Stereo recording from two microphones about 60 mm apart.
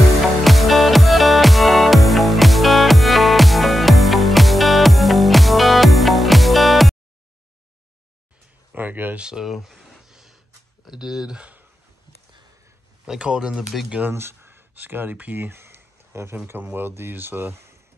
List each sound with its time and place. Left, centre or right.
0.4 s music: centre
8.7 s speech: right
9.1 s a sound: centre
10.9 s speech: centre
13.0 s speech: centre
14.1 s a sound: right
16.4 s speech: right